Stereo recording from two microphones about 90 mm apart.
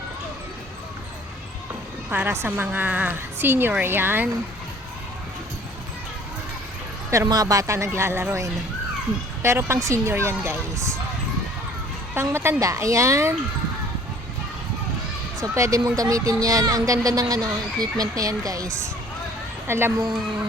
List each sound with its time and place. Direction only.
2.0 s a woman's voice: 25° right (ahead or behind)
7.3 s a woman's voice: 40° right (ahead or behind)
12.1 s speech: 25° right (ahead or behind)
15.4 s speech: 35° right (ahead or behind)
19.6 s a woman's voice: 30° right (ahead or behind)